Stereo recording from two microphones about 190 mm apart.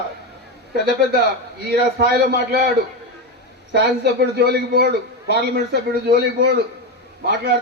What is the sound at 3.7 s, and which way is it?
Speech, 60° right (ahead or behind).